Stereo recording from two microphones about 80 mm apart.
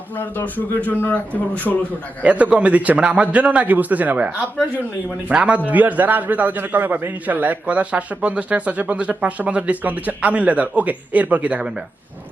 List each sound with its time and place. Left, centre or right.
0.2 s a man's voice: left
2.2 s a man's voice: centre